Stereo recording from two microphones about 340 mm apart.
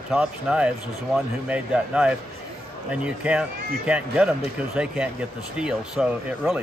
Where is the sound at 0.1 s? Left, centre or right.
Centre.